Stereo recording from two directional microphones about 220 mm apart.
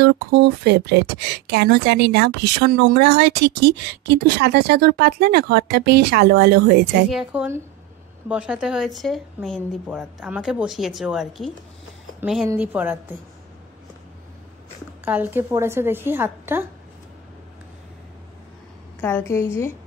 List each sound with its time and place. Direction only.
0.0 s speech: 50° right (ahead or behind)
7.1 s a woman's voice: 5° right (ahead or behind)
15.0 s a woman's voice: 10° right (ahead or behind)
18.9 s a woman's voice: 10° left (ahead or behind)